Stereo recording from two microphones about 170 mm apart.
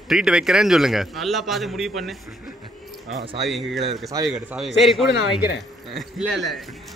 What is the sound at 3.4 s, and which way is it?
A man's voice, centre (ahead or behind).